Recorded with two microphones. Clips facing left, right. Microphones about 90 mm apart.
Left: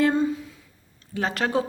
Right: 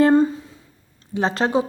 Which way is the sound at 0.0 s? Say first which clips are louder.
Right 6 dB; 40° right (ahead or behind).